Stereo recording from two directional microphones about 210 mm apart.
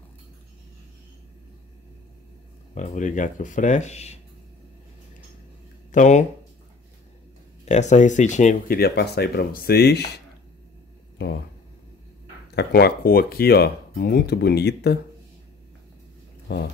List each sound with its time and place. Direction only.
2.7 s speech: 35° left (ahead or behind)
5.9 s speech: 35° left (ahead or behind)
7.6 s speech: 30° left (ahead or behind); by 10.2 s 50° left (ahead or behind)
12.5 s speech: 50° left (ahead or behind)